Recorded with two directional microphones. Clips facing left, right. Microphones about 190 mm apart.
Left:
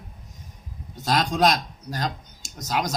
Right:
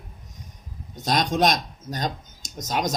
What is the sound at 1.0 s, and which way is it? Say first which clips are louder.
Speech: even; 20° right (ahead or behind).